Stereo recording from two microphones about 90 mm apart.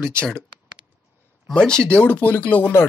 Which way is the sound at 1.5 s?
10° left (ahead or behind).